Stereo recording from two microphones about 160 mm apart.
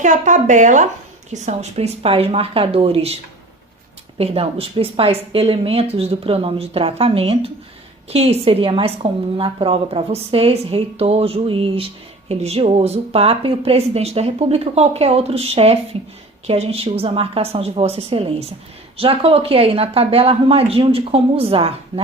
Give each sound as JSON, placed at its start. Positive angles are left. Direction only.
{"t": 0.0, "sound": "a woman's voice", "side_deg": -50}
{"t": 4.2, "sound": "a woman's voice", "side_deg": -35}